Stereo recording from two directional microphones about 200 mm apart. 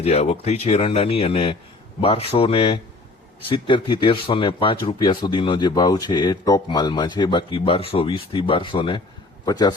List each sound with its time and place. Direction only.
0.0 s speech: 30° left (ahead or behind)